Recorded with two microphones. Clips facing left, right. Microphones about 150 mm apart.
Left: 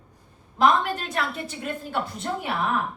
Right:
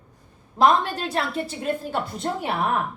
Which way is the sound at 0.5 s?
35° right (ahead or behind).